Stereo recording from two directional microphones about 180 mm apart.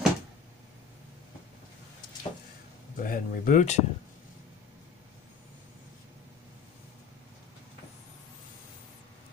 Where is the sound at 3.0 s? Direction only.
50° left (ahead or behind).